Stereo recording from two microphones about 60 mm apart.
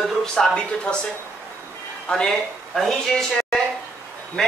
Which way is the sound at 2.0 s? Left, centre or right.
Centre.